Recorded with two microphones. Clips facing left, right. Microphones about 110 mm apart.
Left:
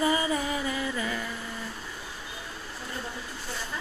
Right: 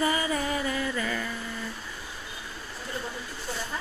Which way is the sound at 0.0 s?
25° left (ahead or behind).